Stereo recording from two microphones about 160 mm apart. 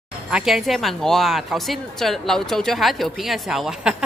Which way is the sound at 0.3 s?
Centre (ahead or behind).